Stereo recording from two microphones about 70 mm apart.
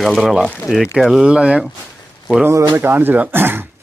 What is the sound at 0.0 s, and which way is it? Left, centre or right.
Speech, centre.